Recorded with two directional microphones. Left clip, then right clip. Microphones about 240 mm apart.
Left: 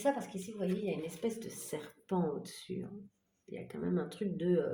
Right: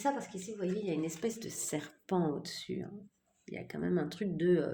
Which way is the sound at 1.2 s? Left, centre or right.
Right.